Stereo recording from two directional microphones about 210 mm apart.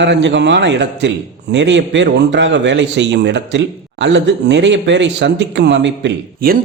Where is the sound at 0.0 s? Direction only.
55° right (ahead or behind).